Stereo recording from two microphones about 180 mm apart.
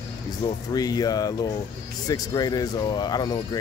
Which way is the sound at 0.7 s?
20° left (ahead or behind).